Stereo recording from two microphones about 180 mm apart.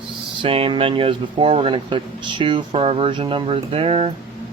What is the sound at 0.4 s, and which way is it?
Speech, 30° right (ahead or behind).